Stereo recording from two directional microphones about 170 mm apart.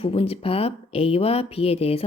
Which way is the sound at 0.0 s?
35° left (ahead or behind).